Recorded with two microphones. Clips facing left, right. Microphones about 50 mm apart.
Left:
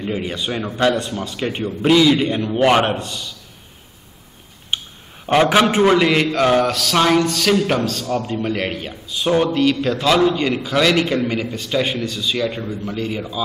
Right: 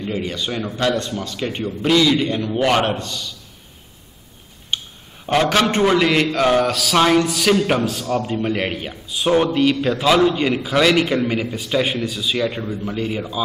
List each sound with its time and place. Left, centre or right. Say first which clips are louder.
0.0 s a man's voice: left 1 dB; centre
4.7 s a sound: left 1 dB; centre
5.2 s a man's voice: left 3 dB; centre